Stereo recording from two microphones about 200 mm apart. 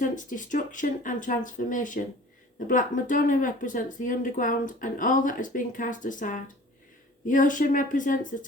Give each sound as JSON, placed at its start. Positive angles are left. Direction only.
{"t": 0.0, "sound": "speech", "side_deg": 40}